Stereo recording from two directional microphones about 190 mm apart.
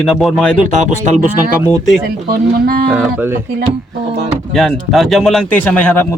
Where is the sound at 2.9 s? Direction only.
10° right (ahead or behind).